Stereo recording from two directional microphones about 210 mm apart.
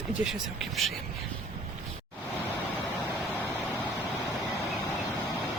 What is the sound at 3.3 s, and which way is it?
Vehicle, 10° left (ahead or behind).